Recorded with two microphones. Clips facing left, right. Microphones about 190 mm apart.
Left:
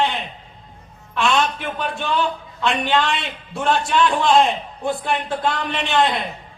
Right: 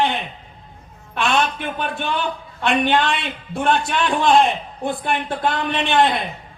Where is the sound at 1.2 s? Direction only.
55° right (ahead or behind).